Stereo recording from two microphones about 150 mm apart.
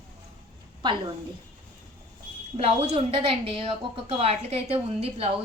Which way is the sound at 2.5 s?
40° right (ahead or behind).